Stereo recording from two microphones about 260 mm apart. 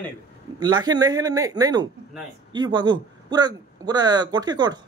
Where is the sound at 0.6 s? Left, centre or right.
Centre.